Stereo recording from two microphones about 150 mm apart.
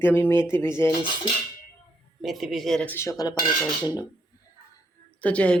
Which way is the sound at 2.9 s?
20° left (ahead or behind).